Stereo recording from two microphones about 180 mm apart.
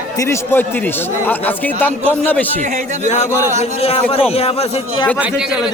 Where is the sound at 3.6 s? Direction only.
35° left (ahead or behind).